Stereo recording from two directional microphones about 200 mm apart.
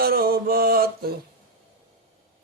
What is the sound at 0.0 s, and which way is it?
Mantra, 50° right (ahead or behind).